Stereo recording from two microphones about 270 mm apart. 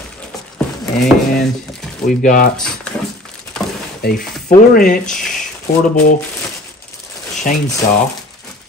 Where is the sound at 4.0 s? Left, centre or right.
Left.